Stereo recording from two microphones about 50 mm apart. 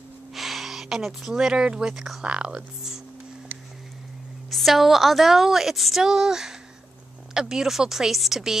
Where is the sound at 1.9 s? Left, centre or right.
Centre.